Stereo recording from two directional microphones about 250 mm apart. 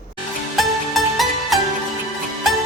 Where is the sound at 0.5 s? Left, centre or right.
Centre.